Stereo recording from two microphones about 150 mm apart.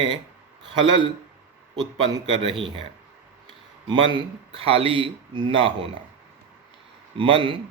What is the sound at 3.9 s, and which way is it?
Speech, 30° right (ahead or behind).